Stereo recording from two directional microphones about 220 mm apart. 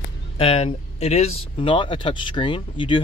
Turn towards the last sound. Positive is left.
turn(degrees=25)  # may be behind; listen again after turning